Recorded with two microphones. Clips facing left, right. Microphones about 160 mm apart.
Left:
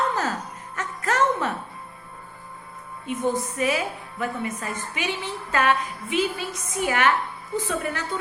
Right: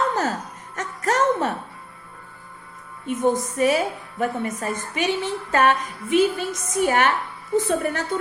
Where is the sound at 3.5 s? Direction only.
40° right (ahead or behind).